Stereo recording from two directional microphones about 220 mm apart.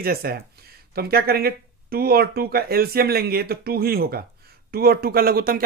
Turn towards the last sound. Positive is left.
turn(degrees=-40)  # may be behind; listen again after turning